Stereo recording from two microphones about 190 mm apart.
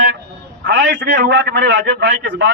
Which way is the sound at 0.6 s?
65° right (ahead or behind).